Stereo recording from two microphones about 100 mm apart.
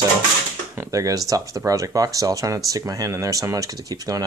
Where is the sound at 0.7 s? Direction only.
35° right (ahead or behind).